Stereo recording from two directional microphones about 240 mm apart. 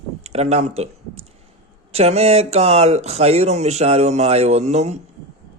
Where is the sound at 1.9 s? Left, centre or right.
Right.